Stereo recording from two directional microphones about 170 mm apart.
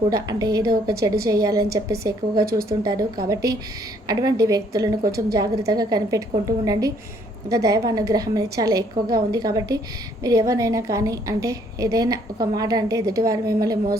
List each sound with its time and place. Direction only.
0.1 s a woman's voice: 20° right (ahead or behind)